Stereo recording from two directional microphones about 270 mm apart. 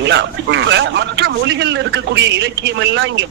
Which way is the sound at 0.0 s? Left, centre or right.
Right.